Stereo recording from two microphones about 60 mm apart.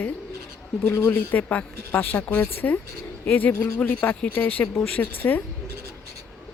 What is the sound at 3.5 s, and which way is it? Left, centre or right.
Speech, left.